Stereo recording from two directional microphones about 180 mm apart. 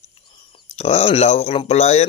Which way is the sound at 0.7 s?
35° left (ahead or behind).